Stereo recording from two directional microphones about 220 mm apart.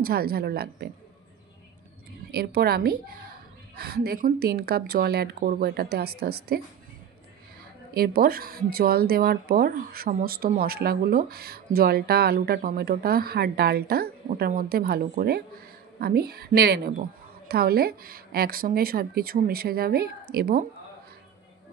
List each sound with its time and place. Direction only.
0.0 s speech: 45° right (ahead or behind)
2.3 s speech: 45° right (ahead or behind)
7.9 s speech: 45° right (ahead or behind)